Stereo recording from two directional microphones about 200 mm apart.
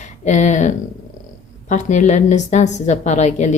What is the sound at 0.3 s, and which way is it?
Speech, 35° left (ahead or behind).